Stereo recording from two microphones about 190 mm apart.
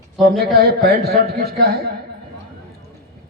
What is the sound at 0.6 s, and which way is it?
A woman's voice, 55° right (ahead or behind).